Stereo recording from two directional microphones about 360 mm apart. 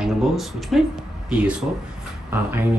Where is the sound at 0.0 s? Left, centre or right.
Centre.